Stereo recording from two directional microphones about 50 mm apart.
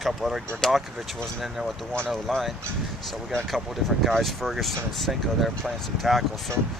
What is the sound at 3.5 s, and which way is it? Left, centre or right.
Speech, centre.